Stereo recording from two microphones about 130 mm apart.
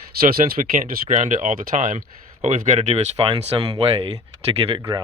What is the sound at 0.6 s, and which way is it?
Speech, 65° right (ahead or behind).